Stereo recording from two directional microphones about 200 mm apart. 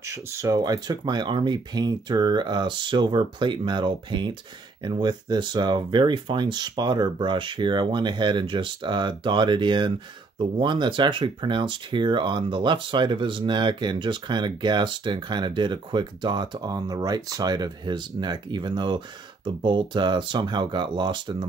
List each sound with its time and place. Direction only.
0.0 s speech: 15° right (ahead or behind)